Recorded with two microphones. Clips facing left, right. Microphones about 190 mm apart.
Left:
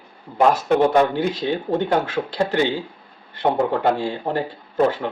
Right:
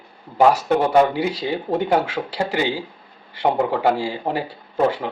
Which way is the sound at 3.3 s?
10° right (ahead or behind).